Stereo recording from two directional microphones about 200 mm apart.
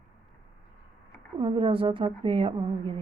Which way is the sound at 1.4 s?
25° right (ahead or behind).